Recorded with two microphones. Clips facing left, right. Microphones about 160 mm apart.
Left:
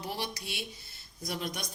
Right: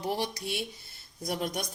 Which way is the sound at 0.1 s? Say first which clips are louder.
Right 7 dB; 45° right (ahead or behind).